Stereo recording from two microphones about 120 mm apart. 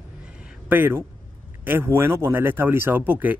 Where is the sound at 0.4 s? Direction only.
5° right (ahead or behind).